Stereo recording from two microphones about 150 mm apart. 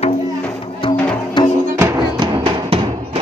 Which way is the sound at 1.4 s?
30° left (ahead or behind).